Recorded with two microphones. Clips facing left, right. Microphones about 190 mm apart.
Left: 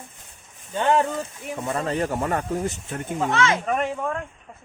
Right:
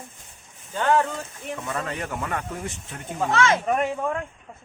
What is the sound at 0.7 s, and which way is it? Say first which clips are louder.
Speech: left 1 dB; 20° left (ahead or behind).